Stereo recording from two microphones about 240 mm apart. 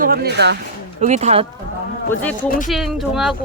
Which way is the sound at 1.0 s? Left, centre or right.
Right.